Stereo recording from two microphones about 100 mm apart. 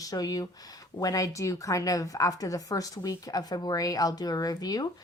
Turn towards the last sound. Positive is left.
turn(degrees=40)  # may be behind; listen again after turning